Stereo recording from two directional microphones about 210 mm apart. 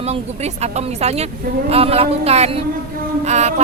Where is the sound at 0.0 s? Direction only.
30° right (ahead or behind).